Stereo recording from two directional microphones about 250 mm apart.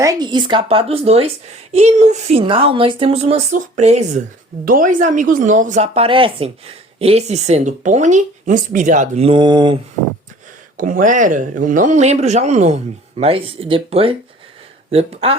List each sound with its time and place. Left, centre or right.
0.0 s speech: centre
10.8 s speech: right